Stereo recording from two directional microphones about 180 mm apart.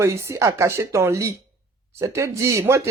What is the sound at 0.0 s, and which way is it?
Speech, 15° right (ahead or behind).